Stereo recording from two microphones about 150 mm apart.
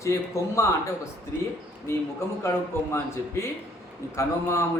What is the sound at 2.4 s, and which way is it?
A man's voice, 20° left (ahead or behind).